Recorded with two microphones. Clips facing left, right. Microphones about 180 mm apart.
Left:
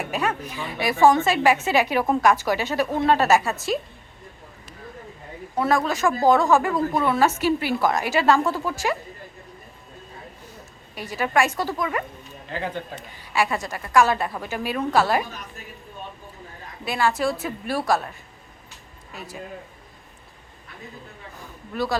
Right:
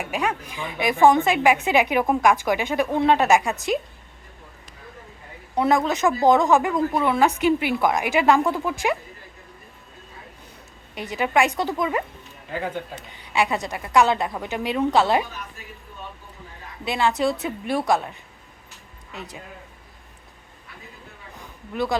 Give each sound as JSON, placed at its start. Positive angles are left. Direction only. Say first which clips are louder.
{"t": 0.0, "sound": "a woman's voice", "louder": "even", "side_deg": -15}
{"t": 5.5, "sound": "a woman's voice", "louder": "right 2 dB", "side_deg": -20}
{"t": 10.9, "sound": "a woman's voice", "louder": "right 1 dB", "side_deg": -20}
{"t": 12.5, "sound": "speech", "louder": "right 1 dB", "side_deg": -5}
{"t": 13.3, "sound": "a woman's voice", "louder": "right 1 dB", "side_deg": -20}
{"t": 16.8, "sound": "a woman's voice", "louder": "right 1 dB", "side_deg": -20}
{"t": 21.7, "sound": "a woman's voice", "louder": "right 1 dB", "side_deg": -15}